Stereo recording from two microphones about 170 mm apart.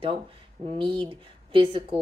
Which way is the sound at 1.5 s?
35° right (ahead or behind).